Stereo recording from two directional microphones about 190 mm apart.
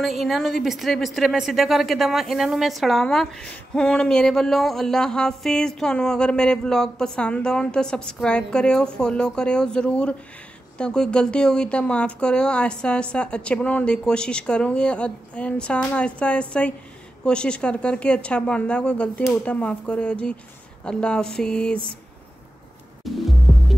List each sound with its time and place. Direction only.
0.0 s a woman's voice: centre (ahead or behind)
23.0 s music: centre (ahead or behind)